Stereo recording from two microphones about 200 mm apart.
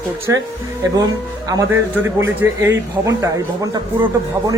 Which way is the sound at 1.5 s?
15° right (ahead or behind).